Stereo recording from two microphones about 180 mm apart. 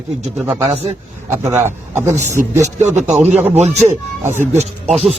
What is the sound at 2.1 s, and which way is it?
Speech, 40° right (ahead or behind).